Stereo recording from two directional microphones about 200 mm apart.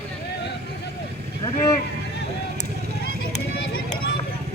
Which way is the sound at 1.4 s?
15° left (ahead or behind).